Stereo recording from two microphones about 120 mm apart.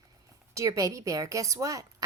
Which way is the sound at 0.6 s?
25° right (ahead or behind).